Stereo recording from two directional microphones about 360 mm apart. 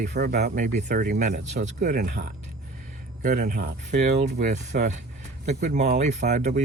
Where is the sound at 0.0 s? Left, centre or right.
Right.